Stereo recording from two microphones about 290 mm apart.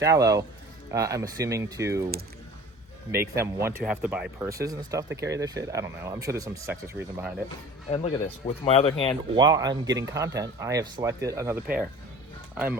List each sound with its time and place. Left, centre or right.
0.0 s speech: centre
3.1 s speech: centre
7.9 s speech: centre
9.3 s speech: centre